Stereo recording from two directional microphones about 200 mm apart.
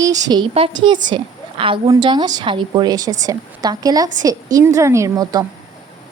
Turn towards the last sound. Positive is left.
turn(degrees=-20)  # may be behind; listen again after turning